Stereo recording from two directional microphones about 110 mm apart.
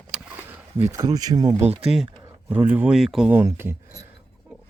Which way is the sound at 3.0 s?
Centre (ahead or behind).